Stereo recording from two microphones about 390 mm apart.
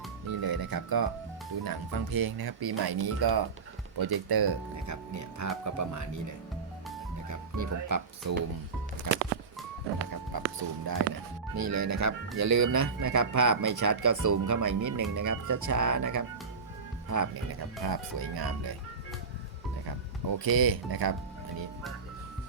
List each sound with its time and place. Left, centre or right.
0.3 s speech: right
4.9 s speech: right
7.3 s speech: right
10.3 s speech: right
11.5 s speech: right
17.8 s speech: right
20.3 s speech: right